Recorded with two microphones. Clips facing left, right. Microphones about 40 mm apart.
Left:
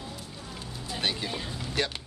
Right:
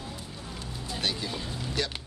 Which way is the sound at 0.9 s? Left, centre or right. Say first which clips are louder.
Left 1 dB; left.